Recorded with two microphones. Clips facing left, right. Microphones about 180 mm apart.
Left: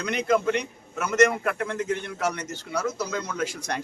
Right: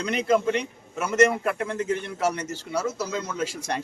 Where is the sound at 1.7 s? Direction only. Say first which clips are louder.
Right 1 dB; 30° right (ahead or behind).